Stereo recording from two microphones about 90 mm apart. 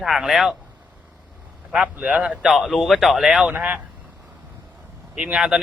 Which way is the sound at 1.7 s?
15° right (ahead or behind).